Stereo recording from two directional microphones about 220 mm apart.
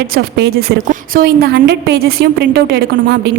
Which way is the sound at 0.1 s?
45° right (ahead or behind).